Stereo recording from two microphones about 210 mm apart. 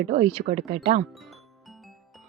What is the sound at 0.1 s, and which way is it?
Speech, 30° right (ahead or behind).